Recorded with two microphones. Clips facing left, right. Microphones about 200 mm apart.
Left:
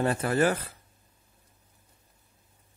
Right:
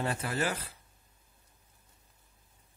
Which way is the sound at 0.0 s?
50° left (ahead or behind).